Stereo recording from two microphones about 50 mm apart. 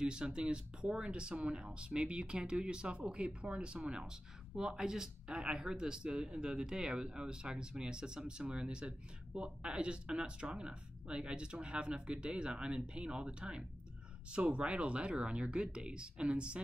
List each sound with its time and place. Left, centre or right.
0.0 s speech: centre